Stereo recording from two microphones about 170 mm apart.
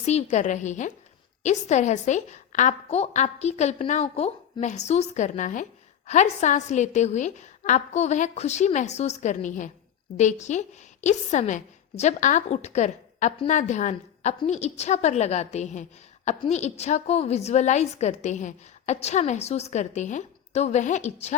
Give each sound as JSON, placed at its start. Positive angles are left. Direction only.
{"t": 0.0, "sound": "a woman's voice", "side_deg": 40}